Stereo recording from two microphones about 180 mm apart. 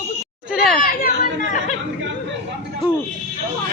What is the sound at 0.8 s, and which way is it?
Speech, 50° left (ahead or behind).